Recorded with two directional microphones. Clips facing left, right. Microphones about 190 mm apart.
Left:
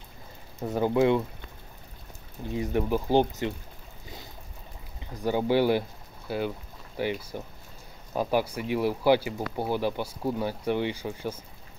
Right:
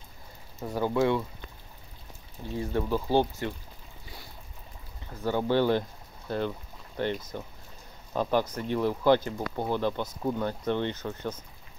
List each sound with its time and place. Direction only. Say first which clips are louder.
0.6 s speech: left 3 dB; 20° left (ahead or behind)
2.5 s speech: left 2 dB; 15° left (ahead or behind)
5.1 s speech: left 2 dB; 15° left (ahead or behind)